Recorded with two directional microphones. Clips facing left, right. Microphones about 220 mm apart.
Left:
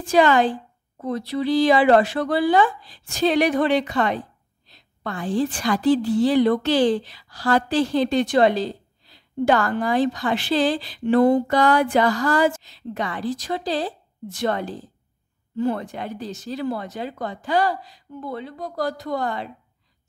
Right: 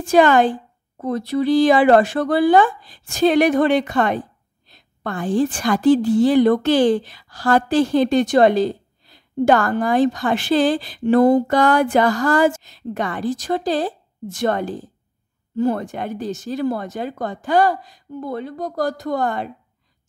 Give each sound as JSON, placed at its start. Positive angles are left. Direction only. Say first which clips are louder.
{"t": 0.0, "sound": "a woman's voice", "louder": "right 3 dB", "side_deg": -50}